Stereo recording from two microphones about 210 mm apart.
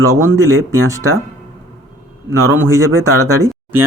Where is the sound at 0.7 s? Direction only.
15° right (ahead or behind).